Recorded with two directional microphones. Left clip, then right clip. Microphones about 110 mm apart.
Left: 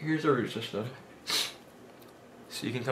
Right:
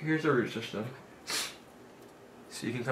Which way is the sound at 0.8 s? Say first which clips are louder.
Left 5 dB; 25° left (ahead or behind).